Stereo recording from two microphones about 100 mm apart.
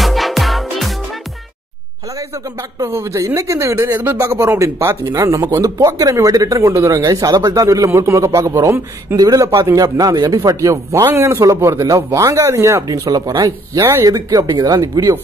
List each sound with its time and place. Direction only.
0.0 s music: centre (ahead or behind)
2.9 s speech: 30° right (ahead or behind)